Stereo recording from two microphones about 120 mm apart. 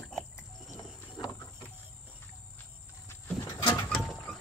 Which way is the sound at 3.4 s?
25° left (ahead or behind).